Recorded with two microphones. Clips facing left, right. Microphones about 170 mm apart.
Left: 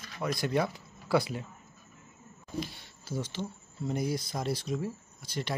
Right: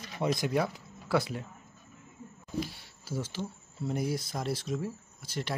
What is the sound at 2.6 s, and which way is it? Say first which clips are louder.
Speech: right 2 dB; 5° right (ahead or behind).